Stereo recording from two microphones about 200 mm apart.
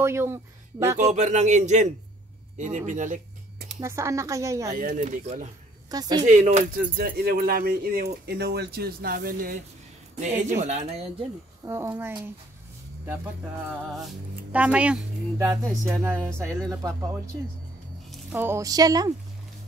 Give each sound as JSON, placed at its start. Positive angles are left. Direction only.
{"t": 0.0, "sound": "speech", "side_deg": -10}
{"t": 0.9, "sound": "speech", "side_deg": -35}
{"t": 3.8, "sound": "a woman's voice", "side_deg": -15}
{"t": 4.7, "sound": "speech", "side_deg": -40}
{"t": 5.9, "sound": "speech", "side_deg": -20}
{"t": 6.2, "sound": "speech", "side_deg": -40}
{"t": 11.6, "sound": "a woman's voice", "side_deg": -15}
{"t": 14.5, "sound": "a woman's voice", "side_deg": -5}
{"t": 15.7, "sound": "music", "side_deg": 0}
{"t": 16.4, "sound": "a woman's voice", "side_deg": -15}